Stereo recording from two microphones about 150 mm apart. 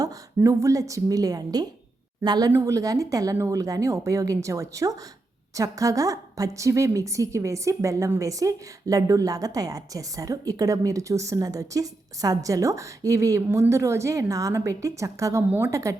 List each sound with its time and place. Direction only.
0.0 s a woman's voice: 20° right (ahead or behind)